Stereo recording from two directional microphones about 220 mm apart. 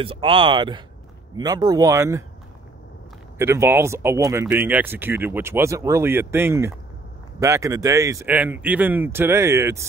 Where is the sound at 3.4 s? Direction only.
10° right (ahead or behind).